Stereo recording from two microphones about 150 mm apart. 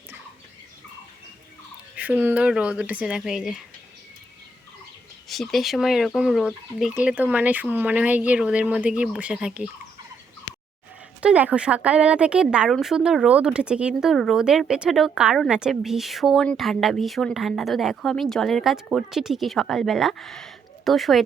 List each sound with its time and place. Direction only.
2.0 s speech: 10° right (ahead or behind)
5.3 s speech: centre (ahead or behind)
10.5 s a sound: 35° left (ahead or behind)
11.2 s speech: 10° right (ahead or behind)